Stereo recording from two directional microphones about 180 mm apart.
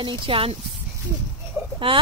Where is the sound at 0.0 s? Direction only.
30° right (ahead or behind).